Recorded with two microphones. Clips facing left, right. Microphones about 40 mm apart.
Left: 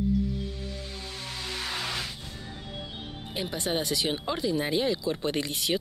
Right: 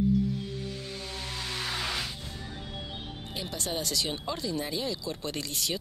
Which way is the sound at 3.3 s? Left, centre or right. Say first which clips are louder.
Left 4 dB; left.